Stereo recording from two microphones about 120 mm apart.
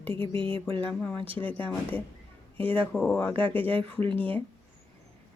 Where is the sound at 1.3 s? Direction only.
15° left (ahead or behind).